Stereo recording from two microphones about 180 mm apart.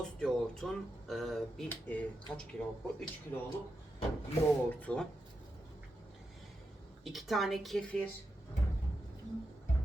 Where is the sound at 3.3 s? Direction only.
15° left (ahead or behind).